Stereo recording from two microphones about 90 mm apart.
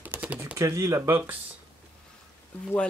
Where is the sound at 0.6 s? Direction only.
35° right (ahead or behind).